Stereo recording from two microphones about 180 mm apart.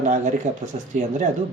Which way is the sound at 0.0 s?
45° right (ahead or behind).